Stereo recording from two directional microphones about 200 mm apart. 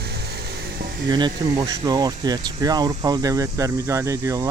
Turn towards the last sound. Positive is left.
turn(degrees=-15)  # may be behind; listen again after turning